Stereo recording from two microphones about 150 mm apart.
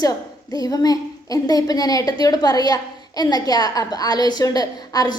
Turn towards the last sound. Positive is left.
turn(degrees=25)  # may be behind; listen again after turning